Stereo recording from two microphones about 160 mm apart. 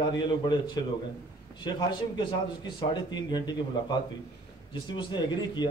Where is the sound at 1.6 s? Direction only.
30° left (ahead or behind).